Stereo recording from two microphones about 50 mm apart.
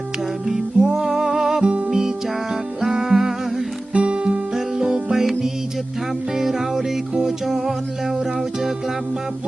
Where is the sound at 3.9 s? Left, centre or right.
Right.